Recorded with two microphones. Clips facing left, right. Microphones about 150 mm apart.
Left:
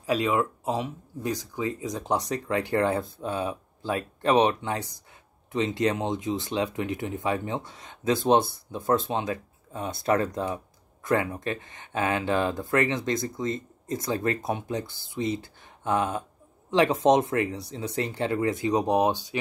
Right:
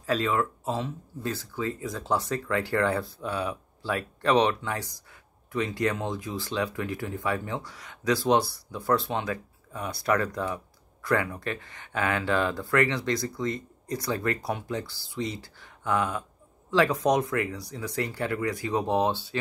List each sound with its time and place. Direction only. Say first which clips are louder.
0.0 s speech: left 2 dB; 15° left (ahead or behind)